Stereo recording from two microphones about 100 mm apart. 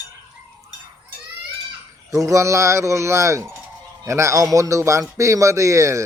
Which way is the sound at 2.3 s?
30° right (ahead or behind).